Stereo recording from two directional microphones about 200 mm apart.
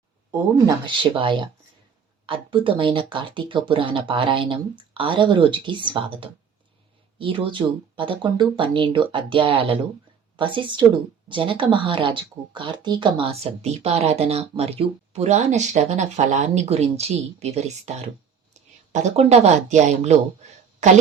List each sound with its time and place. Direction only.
0.9 s speech: 25° right (ahead or behind)